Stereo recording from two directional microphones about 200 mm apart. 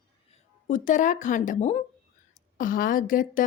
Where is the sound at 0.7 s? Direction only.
40° left (ahead or behind).